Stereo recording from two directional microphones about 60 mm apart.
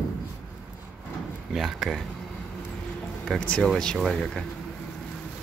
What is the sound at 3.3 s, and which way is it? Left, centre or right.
Speech, centre.